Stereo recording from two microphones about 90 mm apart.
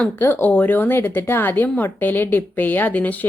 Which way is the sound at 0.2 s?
25° left (ahead or behind).